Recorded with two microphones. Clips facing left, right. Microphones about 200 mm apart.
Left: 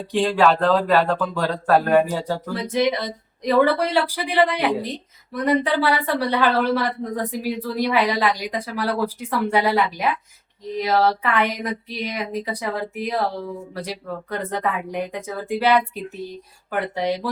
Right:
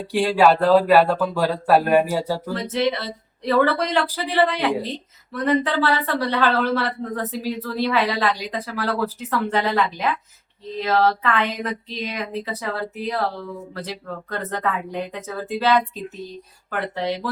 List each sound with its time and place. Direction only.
0.1 s speech: 10° right (ahead or behind)
2.5 s speech: 10° left (ahead or behind)